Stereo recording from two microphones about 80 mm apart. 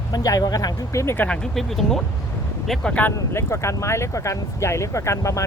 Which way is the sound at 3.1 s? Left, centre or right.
Left.